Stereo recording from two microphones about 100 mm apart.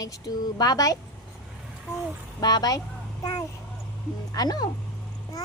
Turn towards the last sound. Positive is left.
turn(degrees=40)  # may be behind; listen again after turning